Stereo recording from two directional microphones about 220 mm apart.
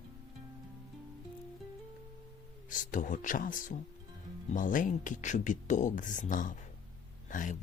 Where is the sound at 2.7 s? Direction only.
35° left (ahead or behind).